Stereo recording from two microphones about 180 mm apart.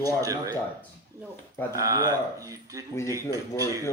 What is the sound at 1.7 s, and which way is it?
A man's voice, 20° right (ahead or behind).